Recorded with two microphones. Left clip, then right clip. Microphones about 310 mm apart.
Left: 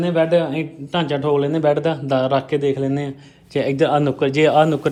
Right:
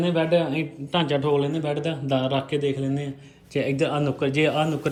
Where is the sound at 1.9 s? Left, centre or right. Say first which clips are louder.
Left 7 dB; centre.